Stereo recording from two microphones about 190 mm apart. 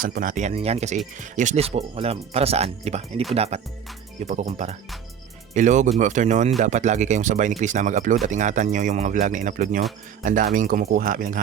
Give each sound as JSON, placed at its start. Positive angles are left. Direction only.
{"t": 0.0, "sound": "speech", "side_deg": -45}